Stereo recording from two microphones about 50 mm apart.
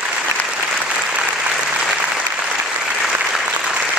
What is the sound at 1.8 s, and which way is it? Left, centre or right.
Applause, right.